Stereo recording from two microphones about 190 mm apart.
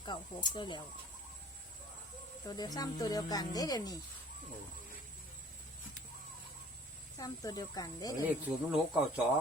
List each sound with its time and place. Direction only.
0.0 s speech: 25° left (ahead or behind)
2.5 s speech: 20° left (ahead or behind)
7.2 s speech: 20° left (ahead or behind)
8.4 s speech: 5° right (ahead or behind)